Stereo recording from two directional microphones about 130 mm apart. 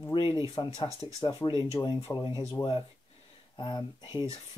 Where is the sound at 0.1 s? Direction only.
40° left (ahead or behind).